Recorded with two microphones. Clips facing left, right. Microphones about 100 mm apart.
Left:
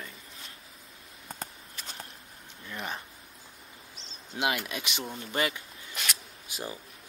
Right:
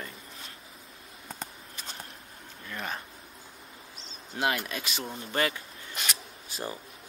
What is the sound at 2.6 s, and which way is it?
Speech, 20° left (ahead or behind).